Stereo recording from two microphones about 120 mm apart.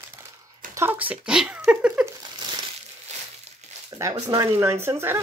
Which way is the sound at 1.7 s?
10° right (ahead or behind).